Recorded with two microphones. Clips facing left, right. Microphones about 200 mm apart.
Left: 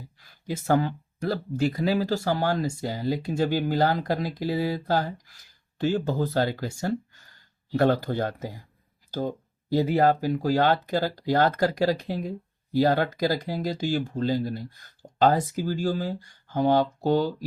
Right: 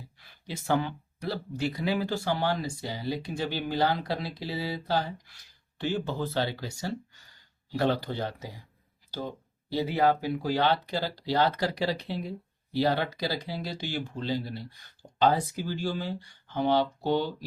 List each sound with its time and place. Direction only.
0.2 s speech: 45° left (ahead or behind)